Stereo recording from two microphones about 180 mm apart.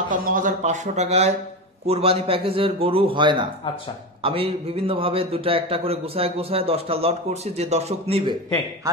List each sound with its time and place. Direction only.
0.1 s a man's voice: 50° right (ahead or behind)